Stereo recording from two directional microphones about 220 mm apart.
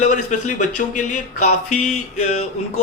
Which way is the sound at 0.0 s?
35° left (ahead or behind).